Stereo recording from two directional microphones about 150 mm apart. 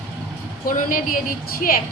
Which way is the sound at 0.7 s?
70° left (ahead or behind).